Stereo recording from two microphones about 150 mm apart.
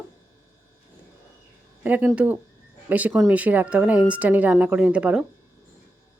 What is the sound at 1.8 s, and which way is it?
Speech, 10° right (ahead or behind).